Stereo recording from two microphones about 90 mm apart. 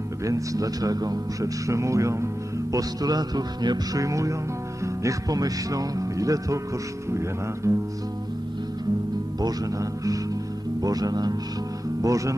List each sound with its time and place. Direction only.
0.2 s a man's voice: 40° right (ahead or behind)
2.7 s music: 45° right (ahead or behind)
7.1 s a man's voice: 30° right (ahead or behind)
9.4 s a man's voice: 40° right (ahead or behind)
10.8 s music: 45° right (ahead or behind)
12.0 s a man's voice: 40° right (ahead or behind)